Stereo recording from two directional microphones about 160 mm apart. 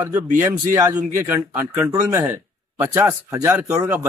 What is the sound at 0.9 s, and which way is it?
Speech, 10° right (ahead or behind).